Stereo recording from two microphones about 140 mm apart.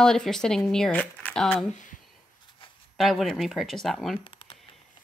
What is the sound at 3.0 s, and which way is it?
Speech, centre (ahead or behind).